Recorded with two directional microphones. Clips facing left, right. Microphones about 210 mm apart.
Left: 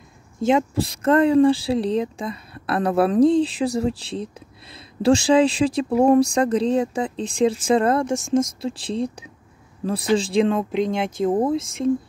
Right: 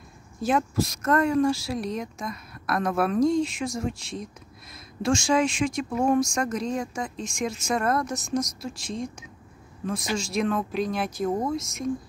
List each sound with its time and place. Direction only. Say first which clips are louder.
0.4 s speech: left 5 dB; 20° left (ahead or behind)